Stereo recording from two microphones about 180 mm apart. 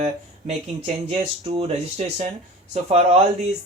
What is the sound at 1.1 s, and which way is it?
Speech, 35° right (ahead or behind).